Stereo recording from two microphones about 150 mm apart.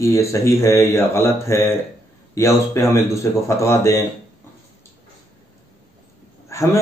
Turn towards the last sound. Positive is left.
turn(degrees=20)  # may be behind; listen again after turning